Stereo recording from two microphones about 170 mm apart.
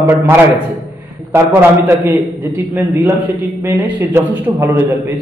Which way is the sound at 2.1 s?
10° right (ahead or behind).